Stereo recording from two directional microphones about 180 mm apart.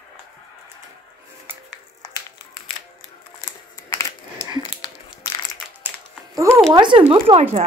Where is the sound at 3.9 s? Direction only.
15° left (ahead or behind).